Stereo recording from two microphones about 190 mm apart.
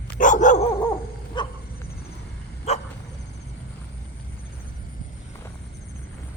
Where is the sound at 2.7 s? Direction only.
35° left (ahead or behind).